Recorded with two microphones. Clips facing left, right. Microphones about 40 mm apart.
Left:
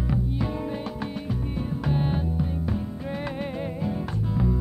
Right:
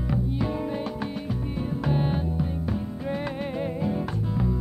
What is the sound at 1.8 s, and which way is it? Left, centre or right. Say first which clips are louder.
Music: even; centre.